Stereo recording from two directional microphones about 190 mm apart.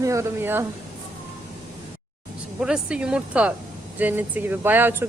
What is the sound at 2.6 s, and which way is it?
A woman's voice, 5° right (ahead or behind).